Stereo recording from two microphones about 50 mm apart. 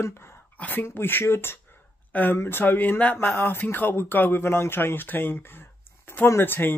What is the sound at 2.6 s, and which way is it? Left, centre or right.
Speech, left.